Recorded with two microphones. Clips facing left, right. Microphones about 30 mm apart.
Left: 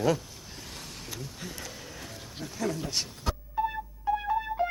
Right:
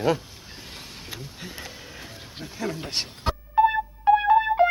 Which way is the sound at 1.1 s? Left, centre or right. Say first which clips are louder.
Right 2 dB; right.